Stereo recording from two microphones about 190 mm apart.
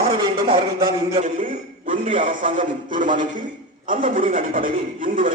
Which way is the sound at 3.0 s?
45° right (ahead or behind).